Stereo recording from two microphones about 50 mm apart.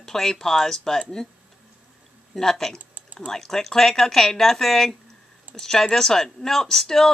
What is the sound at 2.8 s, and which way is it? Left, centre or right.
Typing, right.